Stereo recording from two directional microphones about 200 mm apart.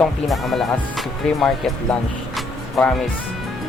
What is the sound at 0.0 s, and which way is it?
Speech, centre (ahead or behind).